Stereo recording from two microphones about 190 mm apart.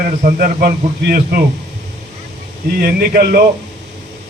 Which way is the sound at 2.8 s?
50° right (ahead or behind).